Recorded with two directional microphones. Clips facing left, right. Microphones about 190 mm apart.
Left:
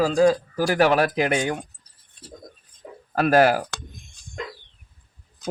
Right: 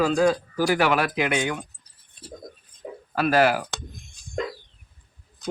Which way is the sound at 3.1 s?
45° left (ahead or behind).